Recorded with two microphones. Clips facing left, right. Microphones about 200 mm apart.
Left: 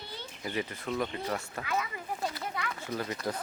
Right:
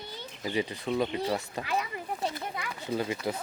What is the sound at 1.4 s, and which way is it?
Speech, 15° right (ahead or behind).